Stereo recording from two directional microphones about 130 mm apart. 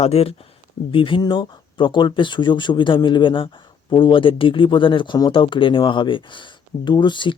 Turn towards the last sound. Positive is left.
turn(degrees=40)  # may be behind; listen again after turning